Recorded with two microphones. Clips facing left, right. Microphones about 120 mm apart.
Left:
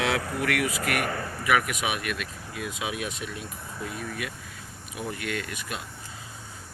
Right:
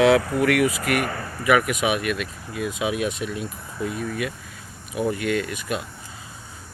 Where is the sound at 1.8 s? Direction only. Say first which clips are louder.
Right 7 dB; 70° right (ahead or behind).